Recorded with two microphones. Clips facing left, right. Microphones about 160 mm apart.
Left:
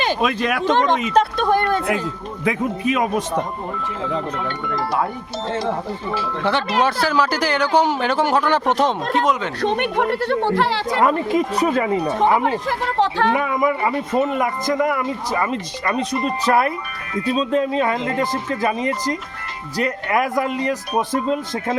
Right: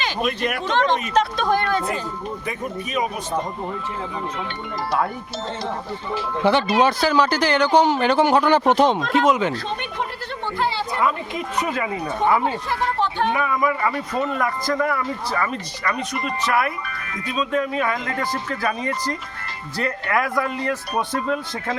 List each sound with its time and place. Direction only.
0.2 s speech: 90° left
1.0 s speech: 60° left (ahead or behind)
2.4 s speech: 90° left
6.4 s speech: centre (ahead or behind)
9.6 s speech: 65° left (ahead or behind); by 11.0 s 85° left
11.0 s speech: 40° left (ahead or behind)
12.4 s speech: 90° left
13.3 s speech: 25° left (ahead or behind)